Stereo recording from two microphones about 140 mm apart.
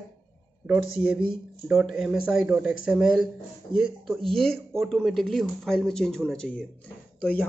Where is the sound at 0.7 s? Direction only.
10° right (ahead or behind).